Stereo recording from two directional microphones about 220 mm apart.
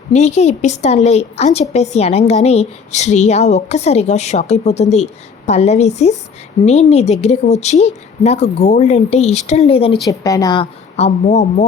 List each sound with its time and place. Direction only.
0.1 s a woman's voice: 30° left (ahead or behind)